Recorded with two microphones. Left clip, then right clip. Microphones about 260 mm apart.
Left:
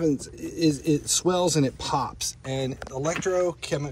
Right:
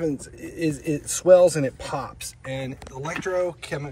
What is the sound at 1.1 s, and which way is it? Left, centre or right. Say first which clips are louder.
Speech: right 12 dB; left.